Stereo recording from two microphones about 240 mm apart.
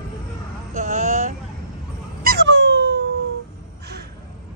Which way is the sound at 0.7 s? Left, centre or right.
Right.